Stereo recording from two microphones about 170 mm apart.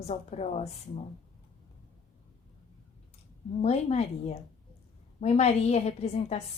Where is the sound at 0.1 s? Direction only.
40° left (ahead or behind).